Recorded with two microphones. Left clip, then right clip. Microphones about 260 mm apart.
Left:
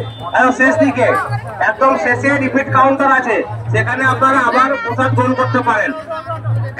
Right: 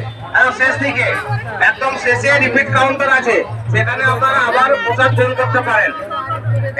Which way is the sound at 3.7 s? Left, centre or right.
Left.